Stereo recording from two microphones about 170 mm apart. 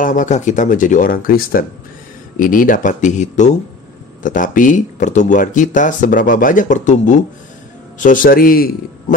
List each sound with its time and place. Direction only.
0.0 s speech: 50° left (ahead or behind)